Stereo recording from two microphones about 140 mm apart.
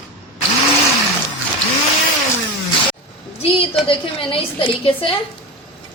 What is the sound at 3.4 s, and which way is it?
A woman's voice, 40° left (ahead or behind).